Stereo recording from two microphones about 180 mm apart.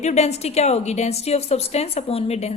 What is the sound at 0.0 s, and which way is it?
A woman's voice, 40° left (ahead or behind).